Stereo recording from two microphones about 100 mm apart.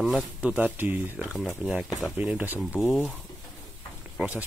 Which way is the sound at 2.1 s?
10° right (ahead or behind).